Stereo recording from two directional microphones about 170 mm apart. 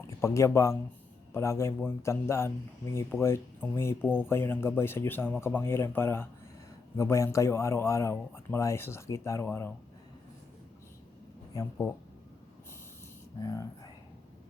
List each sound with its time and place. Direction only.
0.2 s speech: 15° left (ahead or behind)
11.5 s speech: 20° left (ahead or behind)
13.4 s speech: 20° left (ahead or behind)